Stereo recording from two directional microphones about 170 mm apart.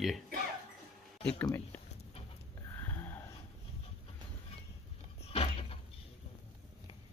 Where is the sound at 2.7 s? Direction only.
10° left (ahead or behind).